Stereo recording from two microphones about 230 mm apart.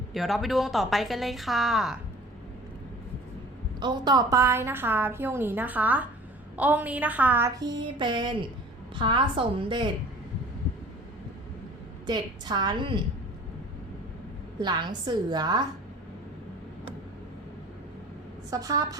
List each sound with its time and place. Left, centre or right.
0.1 s a woman's voice: centre
3.8 s a woman's voice: centre
12.0 s a woman's voice: centre
14.6 s a woman's voice: centre
18.5 s a woman's voice: centre